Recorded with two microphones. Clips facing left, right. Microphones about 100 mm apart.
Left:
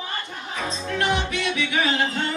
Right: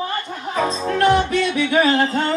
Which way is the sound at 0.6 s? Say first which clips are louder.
Right 8 dB; 40° right (ahead or behind).